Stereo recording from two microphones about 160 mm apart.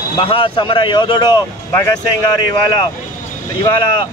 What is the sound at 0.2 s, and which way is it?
A man's voice, 35° left (ahead or behind).